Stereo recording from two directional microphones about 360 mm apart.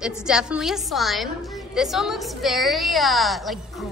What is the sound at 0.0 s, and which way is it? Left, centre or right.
A woman's voice, centre.